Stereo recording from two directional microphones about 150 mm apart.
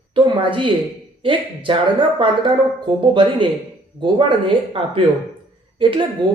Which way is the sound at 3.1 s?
35° right (ahead or behind).